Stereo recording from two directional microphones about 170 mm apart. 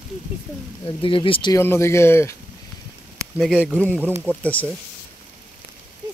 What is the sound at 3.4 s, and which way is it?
Speech, 5° right (ahead or behind).